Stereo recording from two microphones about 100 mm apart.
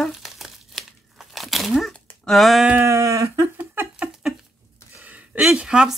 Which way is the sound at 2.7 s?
30° right (ahead or behind).